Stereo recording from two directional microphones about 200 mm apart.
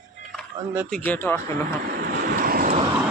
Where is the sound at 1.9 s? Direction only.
50° right (ahead or behind).